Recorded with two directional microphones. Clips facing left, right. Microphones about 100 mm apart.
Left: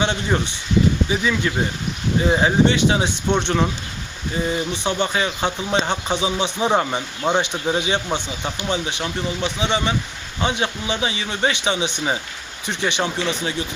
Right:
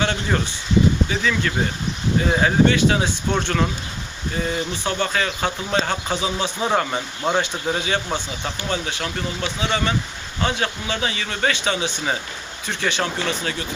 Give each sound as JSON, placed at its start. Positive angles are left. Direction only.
{"t": 0.0, "sound": "speech", "side_deg": 20}